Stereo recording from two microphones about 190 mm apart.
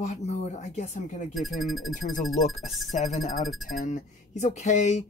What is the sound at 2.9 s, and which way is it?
Speech, 35° left (ahead or behind).